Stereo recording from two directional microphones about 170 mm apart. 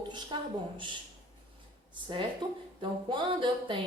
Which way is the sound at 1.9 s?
30° right (ahead or behind).